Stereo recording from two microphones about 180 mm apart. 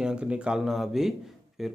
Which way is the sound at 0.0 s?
5° right (ahead or behind).